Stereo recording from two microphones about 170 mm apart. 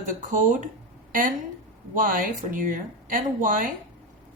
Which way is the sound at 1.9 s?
50° right (ahead or behind).